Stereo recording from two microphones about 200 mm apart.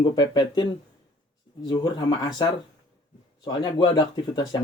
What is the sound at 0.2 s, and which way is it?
Speech, 20° left (ahead or behind).